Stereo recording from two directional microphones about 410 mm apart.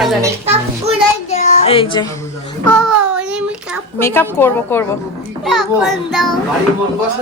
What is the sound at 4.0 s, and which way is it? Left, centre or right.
A woman's voice, centre.